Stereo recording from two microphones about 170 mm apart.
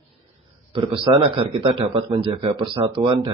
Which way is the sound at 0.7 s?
30° right (ahead or behind).